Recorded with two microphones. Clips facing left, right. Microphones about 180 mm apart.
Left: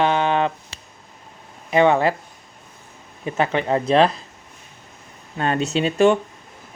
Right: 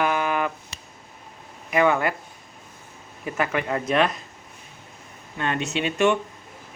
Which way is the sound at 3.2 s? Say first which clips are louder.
Left 4 dB; 25° left (ahead or behind).